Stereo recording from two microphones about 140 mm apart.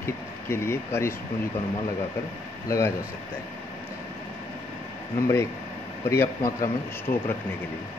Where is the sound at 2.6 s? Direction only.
20° left (ahead or behind).